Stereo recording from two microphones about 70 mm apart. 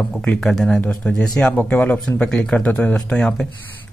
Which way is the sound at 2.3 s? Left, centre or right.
Centre.